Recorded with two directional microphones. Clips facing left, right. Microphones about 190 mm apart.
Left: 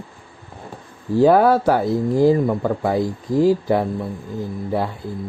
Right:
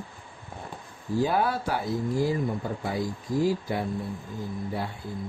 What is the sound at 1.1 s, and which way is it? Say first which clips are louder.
Speech: left 12 dB; 70° left (ahead or behind).